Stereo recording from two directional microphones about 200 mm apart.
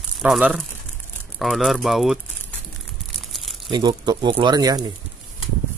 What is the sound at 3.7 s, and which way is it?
Speech, 25° right (ahead or behind).